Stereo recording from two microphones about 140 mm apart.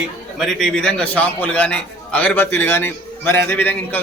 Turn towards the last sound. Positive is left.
turn(degrees=15)  # may be behind; listen again after turning